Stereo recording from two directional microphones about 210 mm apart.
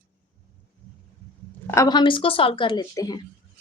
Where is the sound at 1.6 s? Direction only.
15° left (ahead or behind).